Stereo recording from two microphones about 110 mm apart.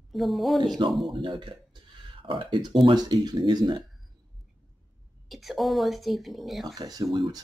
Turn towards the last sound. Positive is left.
turn(degrees=-35)  # may be behind; listen again after turning